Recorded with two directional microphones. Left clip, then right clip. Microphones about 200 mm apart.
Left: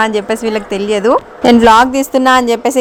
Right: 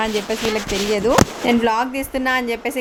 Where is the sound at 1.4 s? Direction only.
35° left (ahead or behind).